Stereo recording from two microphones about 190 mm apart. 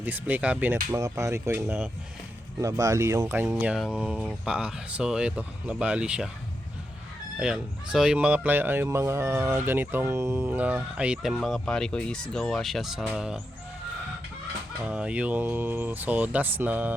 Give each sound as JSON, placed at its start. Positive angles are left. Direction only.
{"t": 0.0, "sound": "speech", "side_deg": -10}
{"t": 3.4, "sound": "speech", "side_deg": -5}
{"t": 7.3, "sound": "speech", "side_deg": -5}
{"t": 14.8, "sound": "speech", "side_deg": -5}